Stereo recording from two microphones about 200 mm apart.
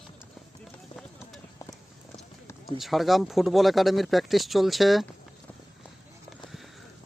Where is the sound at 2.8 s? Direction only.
Centre (ahead or behind).